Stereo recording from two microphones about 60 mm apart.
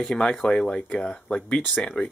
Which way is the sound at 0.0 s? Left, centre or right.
Centre.